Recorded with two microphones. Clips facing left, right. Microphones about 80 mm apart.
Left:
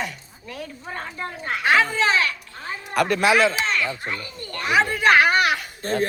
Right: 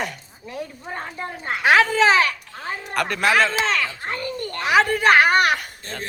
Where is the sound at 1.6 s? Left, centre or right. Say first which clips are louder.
Right 3 dB; right.